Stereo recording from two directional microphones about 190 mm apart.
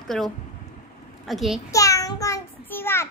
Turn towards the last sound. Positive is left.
turn(degrees=10)  # may be behind; listen again after turning